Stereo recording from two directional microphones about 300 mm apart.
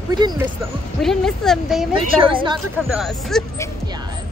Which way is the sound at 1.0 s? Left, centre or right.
Centre.